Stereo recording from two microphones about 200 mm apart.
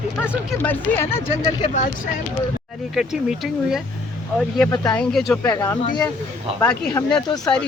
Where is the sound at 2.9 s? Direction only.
Centre (ahead or behind).